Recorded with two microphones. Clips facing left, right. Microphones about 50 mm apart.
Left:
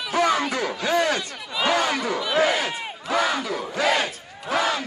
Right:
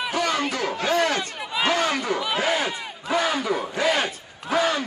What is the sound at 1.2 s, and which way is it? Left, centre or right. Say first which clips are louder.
Crowd: right 1 dB; centre.